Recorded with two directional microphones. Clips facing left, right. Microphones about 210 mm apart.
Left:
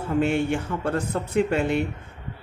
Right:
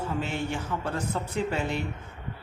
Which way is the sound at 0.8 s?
55° left (ahead or behind).